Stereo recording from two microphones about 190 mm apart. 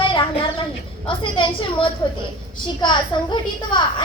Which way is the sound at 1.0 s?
25° left (ahead or behind).